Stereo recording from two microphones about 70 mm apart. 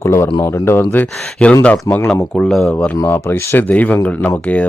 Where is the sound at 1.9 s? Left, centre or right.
Left.